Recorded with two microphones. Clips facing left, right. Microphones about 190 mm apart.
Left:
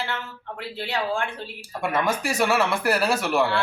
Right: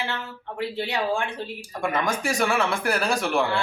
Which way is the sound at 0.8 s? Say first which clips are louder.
Even; 15° right (ahead or behind).